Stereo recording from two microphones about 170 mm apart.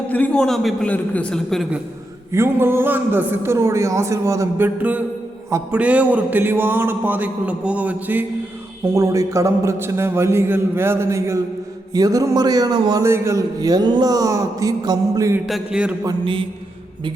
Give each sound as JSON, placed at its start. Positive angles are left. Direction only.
{"t": 0.1, "sound": "a man's voice", "side_deg": 5}
{"t": 2.3, "sound": "a man's voice", "side_deg": -15}
{"t": 15.4, "sound": "a man's voice", "side_deg": -5}
{"t": 16.0, "sound": "mantra", "side_deg": -30}